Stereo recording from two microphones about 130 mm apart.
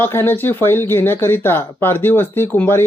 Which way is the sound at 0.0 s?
15° left (ahead or behind).